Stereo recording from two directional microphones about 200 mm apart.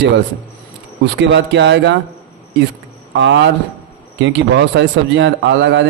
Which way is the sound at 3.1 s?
65° right (ahead or behind).